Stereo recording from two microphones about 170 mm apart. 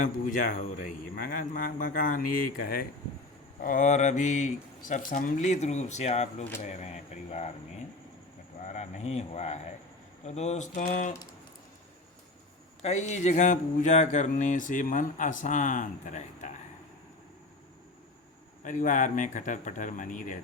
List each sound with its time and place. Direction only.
0.0 s speech: 50° left (ahead or behind)
6.6 s a sound: 40° left (ahead or behind)
8.6 s speech: 40° left (ahead or behind)
12.8 s speech: 40° left (ahead or behind)
18.6 s speech: 50° left (ahead or behind)